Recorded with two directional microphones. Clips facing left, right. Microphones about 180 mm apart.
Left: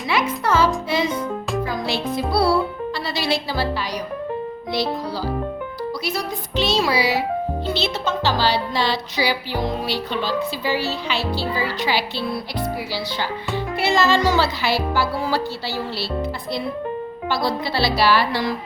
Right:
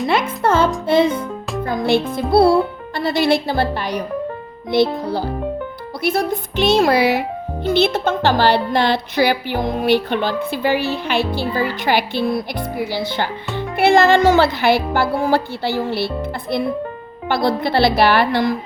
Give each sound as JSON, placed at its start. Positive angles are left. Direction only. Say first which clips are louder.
{"t": 0.1, "sound": "a child's voice", "louder": "right 1 dB", "side_deg": -55}
{"t": 17.2, "sound": "speech", "louder": "right 5 dB", "side_deg": -55}